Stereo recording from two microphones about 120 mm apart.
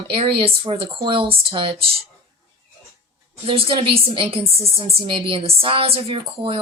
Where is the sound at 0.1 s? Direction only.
50° right (ahead or behind).